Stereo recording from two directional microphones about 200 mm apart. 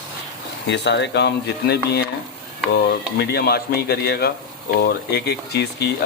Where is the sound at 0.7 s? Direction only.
60° left (ahead or behind).